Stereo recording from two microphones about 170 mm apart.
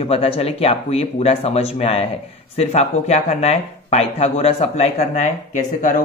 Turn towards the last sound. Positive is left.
turn(degrees=50)  # may be behind; listen again after turning